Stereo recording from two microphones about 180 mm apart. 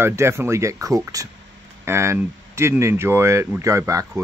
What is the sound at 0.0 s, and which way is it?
Speech, 15° right (ahead or behind).